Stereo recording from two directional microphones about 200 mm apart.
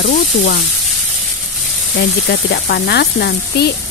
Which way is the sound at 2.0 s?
60° left (ahead or behind).